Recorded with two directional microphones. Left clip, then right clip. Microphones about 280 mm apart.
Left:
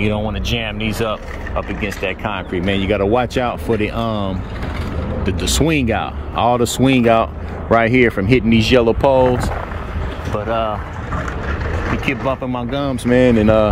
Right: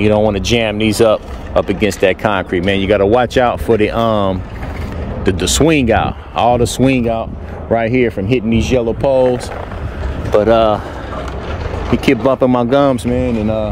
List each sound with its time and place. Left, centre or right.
0.3 s speech: right
1.8 s speech: right
2.0 s speech: right
2.5 s speech: centre
10.5 s speech: right
11.9 s speech: centre
13.1 s mantra: centre